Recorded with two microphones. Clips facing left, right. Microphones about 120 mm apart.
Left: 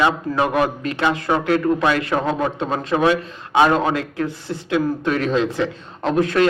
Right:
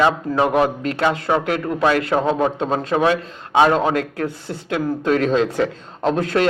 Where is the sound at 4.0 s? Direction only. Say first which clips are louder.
Right 1 dB; 50° right (ahead or behind).